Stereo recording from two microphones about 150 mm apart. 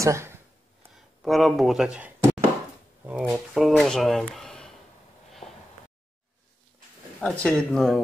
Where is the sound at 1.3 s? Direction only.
Centre (ahead or behind).